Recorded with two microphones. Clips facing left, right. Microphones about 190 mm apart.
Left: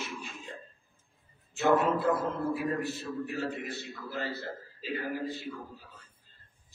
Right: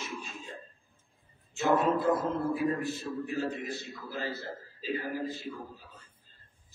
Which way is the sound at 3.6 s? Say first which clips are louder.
Even; 60° left (ahead or behind).